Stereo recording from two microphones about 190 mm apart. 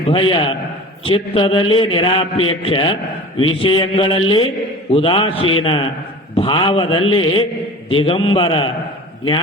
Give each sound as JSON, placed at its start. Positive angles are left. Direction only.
{"t": 0.1, "sound": "a man's voice", "side_deg": 25}